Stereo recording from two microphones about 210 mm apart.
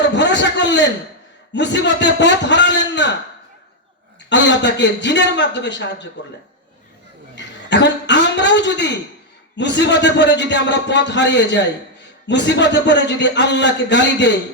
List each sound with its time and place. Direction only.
0.0 s a man's voice: 55° left (ahead or behind)
4.3 s a man's voice: 55° left (ahead or behind)
7.3 s a sound: 55° left (ahead or behind)
9.6 s a man's voice: 55° left (ahead or behind)